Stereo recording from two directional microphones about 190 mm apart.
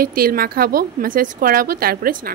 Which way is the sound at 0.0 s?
50° right (ahead or behind).